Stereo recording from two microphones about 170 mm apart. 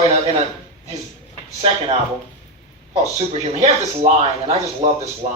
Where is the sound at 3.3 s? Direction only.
40° right (ahead or behind).